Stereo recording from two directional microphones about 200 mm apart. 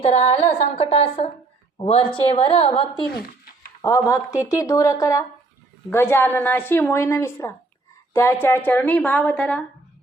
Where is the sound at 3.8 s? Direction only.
15° left (ahead or behind).